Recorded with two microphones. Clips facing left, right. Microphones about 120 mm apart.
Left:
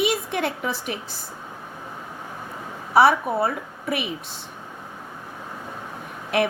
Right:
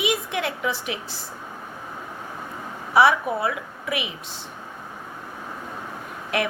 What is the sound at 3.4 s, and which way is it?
Speech, 30° left (ahead or behind).